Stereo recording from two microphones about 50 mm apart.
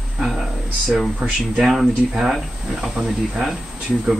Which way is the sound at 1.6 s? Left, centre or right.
Centre.